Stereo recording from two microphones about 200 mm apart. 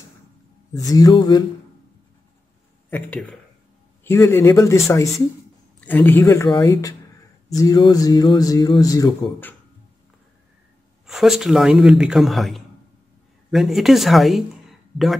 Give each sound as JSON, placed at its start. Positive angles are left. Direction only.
{"t": 0.7, "sound": "speech", "side_deg": 20}
{"t": 2.9, "sound": "a man's voice", "side_deg": 5}
{"t": 11.1, "sound": "a man's voice", "side_deg": 0}